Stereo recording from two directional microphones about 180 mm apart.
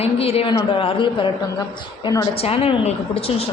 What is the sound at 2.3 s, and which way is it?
A man's voice, 35° left (ahead or behind).